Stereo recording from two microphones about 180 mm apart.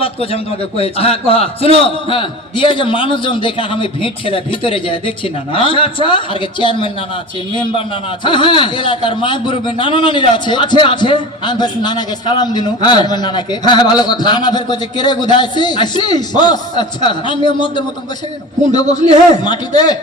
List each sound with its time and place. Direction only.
0.0 s a man's voice: 30° left (ahead or behind)
18.9 s a man's voice: 40° right (ahead or behind)
19.5 s a man's voice: 25° left (ahead or behind)